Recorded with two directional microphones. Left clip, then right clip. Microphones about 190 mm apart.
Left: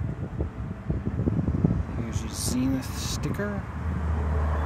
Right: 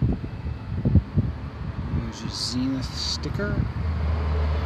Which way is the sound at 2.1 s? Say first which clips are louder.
Right 4 dB; 10° left (ahead or behind).